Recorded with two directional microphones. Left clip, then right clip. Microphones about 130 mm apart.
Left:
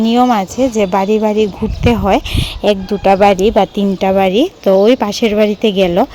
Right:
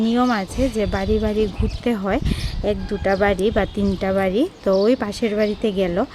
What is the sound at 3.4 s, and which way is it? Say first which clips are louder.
Speech: left 9 dB; 25° left (ahead or behind).